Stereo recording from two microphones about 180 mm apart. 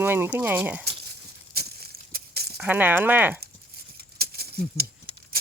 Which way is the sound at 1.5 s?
60° right (ahead or behind).